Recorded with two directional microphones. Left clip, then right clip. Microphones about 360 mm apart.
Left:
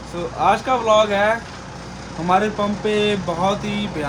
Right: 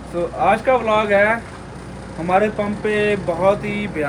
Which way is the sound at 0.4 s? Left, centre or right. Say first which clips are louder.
Even; centre.